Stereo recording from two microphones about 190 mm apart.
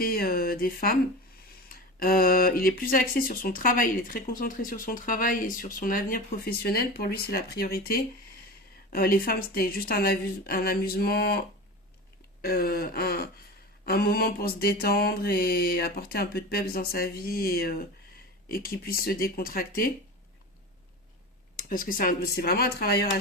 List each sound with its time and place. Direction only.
0.0 s speech: 50° left (ahead or behind)
21.5 s speech: 50° left (ahead or behind)